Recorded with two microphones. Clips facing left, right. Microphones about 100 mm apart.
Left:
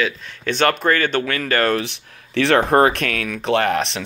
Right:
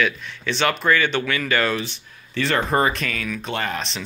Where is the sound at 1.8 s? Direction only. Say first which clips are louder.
Left 3 dB; 80° left.